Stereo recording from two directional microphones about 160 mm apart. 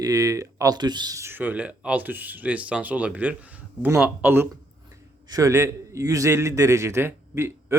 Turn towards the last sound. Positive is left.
turn(degrees=-15)  # may be behind; listen again after turning